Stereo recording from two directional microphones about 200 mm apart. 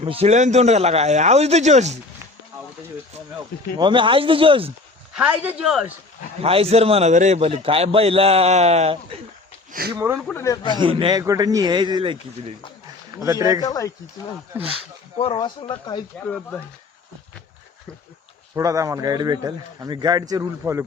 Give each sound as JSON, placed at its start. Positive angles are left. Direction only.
{"t": 0.0, "sound": "speech", "side_deg": -30}
{"t": 3.8, "sound": "a man's voice", "side_deg": -25}
{"t": 5.1, "sound": "speech", "side_deg": -5}
{"t": 6.4, "sound": "a man's voice", "side_deg": -30}
{"t": 10.2, "sound": "speech", "side_deg": 5}
{"t": 10.4, "sound": "speech", "side_deg": 20}
{"t": 10.8, "sound": "a man's voice", "side_deg": -25}
{"t": 13.7, "sound": "speech", "side_deg": 15}
{"t": 15.2, "sound": "speech", "side_deg": 25}
{"t": 16.2, "sound": "speech", "side_deg": 5}
{"t": 18.5, "sound": "a man's voice", "side_deg": -15}